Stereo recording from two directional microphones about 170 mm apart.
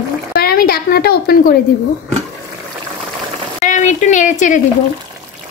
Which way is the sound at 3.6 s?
45° left (ahead or behind).